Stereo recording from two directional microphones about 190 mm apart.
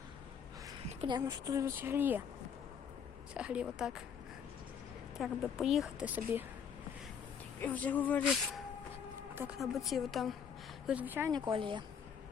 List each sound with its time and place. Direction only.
0.9 s speech: 25° right (ahead or behind)
3.3 s speech: 5° right (ahead or behind)
5.1 s speech: centre (ahead or behind)
7.6 s speech: 10° left (ahead or behind); by 11.3 s 10° right (ahead or behind)
11.3 s speech: 25° right (ahead or behind)